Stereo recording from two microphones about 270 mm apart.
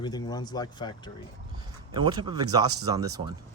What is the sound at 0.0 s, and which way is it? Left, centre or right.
Speech, centre.